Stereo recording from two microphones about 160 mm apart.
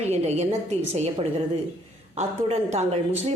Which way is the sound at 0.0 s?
40° right (ahead or behind).